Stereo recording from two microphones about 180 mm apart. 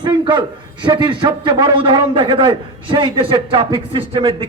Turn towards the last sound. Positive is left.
turn(degrees=-30)  # may be behind; listen again after turning